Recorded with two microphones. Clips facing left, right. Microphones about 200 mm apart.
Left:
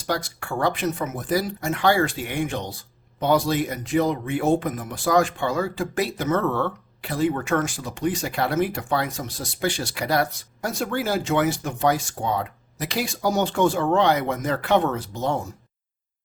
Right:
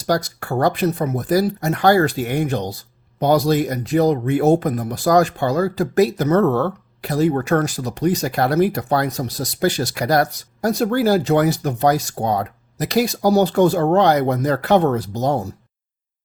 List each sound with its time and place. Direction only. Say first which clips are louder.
0.1 s speech: right 6 dB; 40° right (ahead or behind)